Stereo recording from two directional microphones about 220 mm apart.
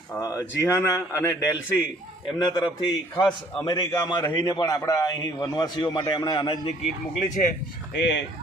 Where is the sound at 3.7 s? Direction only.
20° left (ahead or behind).